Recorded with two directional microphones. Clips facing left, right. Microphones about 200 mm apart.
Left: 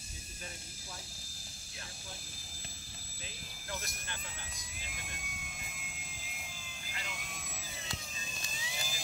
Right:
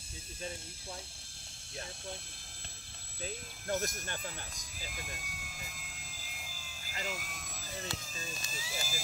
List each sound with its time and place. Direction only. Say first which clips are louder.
3.6 s speech: right 9 dB; 45° right (ahead or behind)
4.6 s vehicle: right 3 dB; centre (ahead or behind)
8.5 s a sound: even; 5° right (ahead or behind)